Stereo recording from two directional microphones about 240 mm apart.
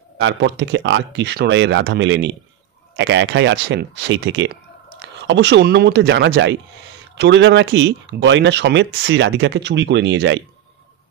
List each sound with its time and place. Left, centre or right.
0.2 s speech: right